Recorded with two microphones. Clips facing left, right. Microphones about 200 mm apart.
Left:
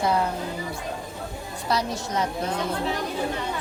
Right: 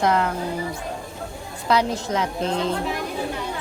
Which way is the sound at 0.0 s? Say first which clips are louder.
Right 3 dB; 85° right.